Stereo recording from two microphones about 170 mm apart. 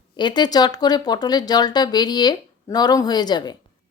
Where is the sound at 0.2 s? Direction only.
25° left (ahead or behind).